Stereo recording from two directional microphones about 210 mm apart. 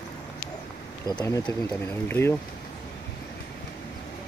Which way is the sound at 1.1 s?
15° left (ahead or behind).